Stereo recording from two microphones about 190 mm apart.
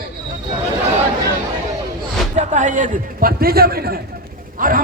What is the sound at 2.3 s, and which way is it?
A man's voice, 40° right (ahead or behind).